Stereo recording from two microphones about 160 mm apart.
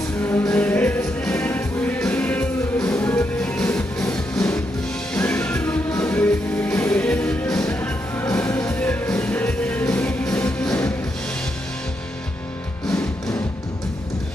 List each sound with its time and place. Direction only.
0.2 s music: 20° left (ahead or behind)
5.1 s music: 10° left (ahead or behind)